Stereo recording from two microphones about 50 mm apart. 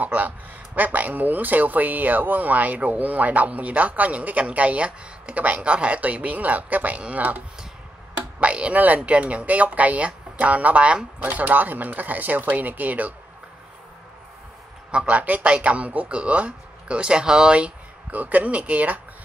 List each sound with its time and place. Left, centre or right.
0.0 s speech: right
11.2 s speech: right
14.9 s a man's voice: centre
15.1 s speech: right
18.1 s speech: right